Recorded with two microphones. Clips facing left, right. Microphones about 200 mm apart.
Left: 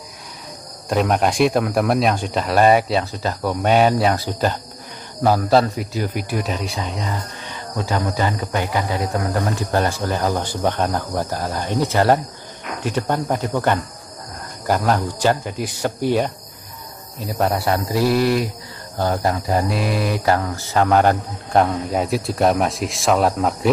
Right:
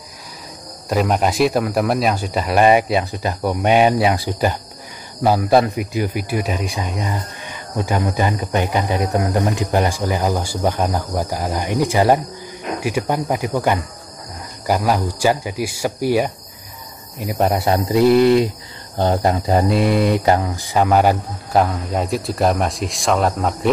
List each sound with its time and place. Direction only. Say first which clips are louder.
0.8 s speech: even; centre (ahead or behind)
17.2 s mantra: right 2 dB; 15° right (ahead or behind)
20.9 s speech: even; 5° right (ahead or behind)